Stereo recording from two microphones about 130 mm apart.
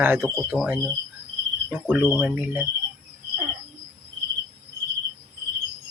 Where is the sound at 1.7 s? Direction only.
15° right (ahead or behind).